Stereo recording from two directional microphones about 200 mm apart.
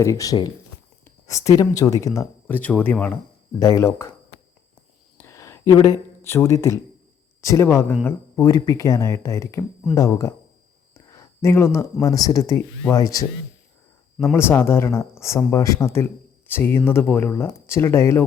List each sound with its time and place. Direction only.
0.0 s speech: 15° left (ahead or behind)
5.1 s a sound: 15° left (ahead or behind)
7.4 s speech: 15° left (ahead or behind)
14.3 s speech: 10° left (ahead or behind)